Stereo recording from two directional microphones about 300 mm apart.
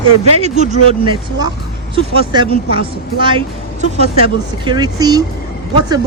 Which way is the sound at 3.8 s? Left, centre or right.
Centre.